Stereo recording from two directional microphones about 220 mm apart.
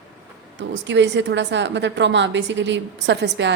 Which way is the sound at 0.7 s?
55° right (ahead or behind).